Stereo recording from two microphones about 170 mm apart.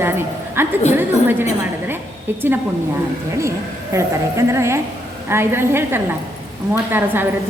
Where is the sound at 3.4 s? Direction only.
15° right (ahead or behind).